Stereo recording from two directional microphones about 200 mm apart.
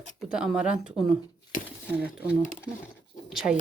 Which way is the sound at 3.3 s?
Centre (ahead or behind).